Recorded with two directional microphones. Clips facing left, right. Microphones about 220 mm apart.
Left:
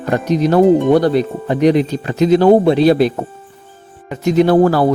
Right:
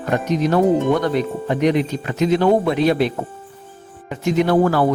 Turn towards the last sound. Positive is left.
turn(degrees=35)  # may be behind; listen again after turning